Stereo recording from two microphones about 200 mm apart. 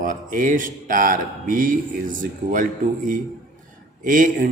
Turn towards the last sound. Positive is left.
turn(degrees=-40)  # may be behind; listen again after turning